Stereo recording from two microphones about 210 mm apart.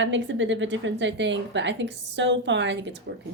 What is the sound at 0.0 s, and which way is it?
A woman's voice, 60° right (ahead or behind).